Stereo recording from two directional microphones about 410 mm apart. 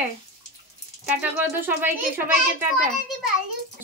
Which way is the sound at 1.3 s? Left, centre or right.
Centre.